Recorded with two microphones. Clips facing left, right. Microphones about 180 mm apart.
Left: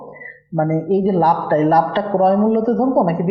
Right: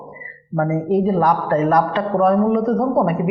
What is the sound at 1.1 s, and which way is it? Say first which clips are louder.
Speech: left 2 dB; 30° left (ahead or behind).